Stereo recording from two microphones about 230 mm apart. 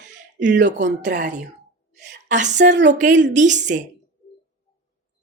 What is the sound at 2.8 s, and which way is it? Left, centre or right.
Speech, right.